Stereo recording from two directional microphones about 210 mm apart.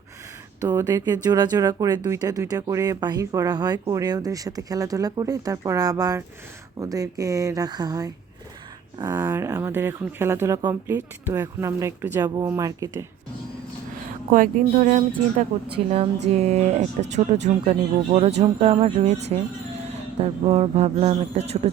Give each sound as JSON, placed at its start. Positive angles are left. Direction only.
{"t": 0.6, "sound": "speech", "side_deg": -15}
{"t": 14.3, "sound": "speech", "side_deg": -40}